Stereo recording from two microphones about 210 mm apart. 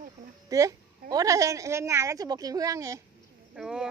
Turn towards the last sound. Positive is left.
turn(degrees=-5)  # may be behind; listen again after turning